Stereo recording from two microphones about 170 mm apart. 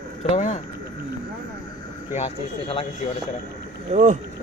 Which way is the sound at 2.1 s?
35° left (ahead or behind).